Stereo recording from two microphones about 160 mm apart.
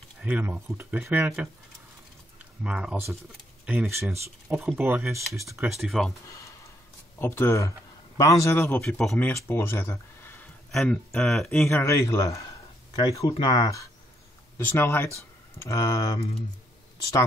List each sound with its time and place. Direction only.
0.2 s speech: 10° right (ahead or behind)
2.6 s speech: 5° right (ahead or behind)
5.7 s speech: centre (ahead or behind)
6.3 s a sound: 20° left (ahead or behind)
7.2 s speech: 15° left (ahead or behind)
9.1 s speech: 15° left (ahead or behind)
10.7 s speech: centre (ahead or behind)
11.7 s speech: 15° left (ahead or behind)
14.6 s speech: 10° left (ahead or behind)